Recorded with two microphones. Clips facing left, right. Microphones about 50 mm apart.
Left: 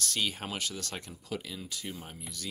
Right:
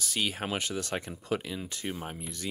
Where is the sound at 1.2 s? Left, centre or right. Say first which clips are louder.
Right 6 dB; right.